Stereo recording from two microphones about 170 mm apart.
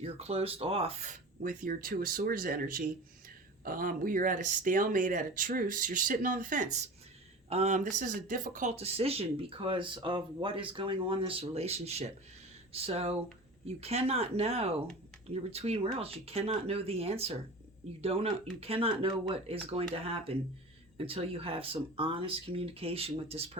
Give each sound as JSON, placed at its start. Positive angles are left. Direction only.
{"t": 0.0, "sound": "speech", "side_deg": -35}
{"t": 8.7, "sound": "speech", "side_deg": -35}